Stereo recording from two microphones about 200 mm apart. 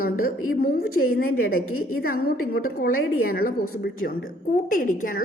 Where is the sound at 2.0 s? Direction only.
50° left (ahead or behind).